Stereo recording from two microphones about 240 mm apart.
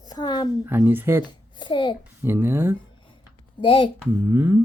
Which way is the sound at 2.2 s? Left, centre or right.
Centre.